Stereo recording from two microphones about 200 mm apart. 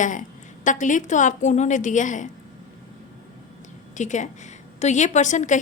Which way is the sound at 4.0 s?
35° left (ahead or behind).